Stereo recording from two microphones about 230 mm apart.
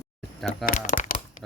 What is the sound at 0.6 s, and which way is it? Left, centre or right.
Speech, left.